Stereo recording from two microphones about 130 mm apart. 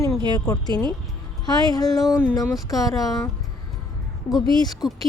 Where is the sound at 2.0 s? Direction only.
5° right (ahead or behind).